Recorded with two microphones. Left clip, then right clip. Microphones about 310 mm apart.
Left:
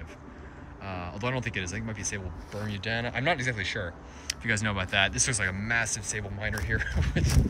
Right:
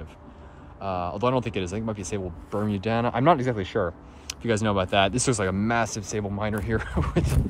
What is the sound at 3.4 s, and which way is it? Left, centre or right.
Speech, right.